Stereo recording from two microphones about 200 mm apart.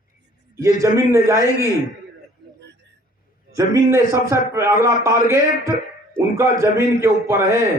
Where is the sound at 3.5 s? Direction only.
15° right (ahead or behind).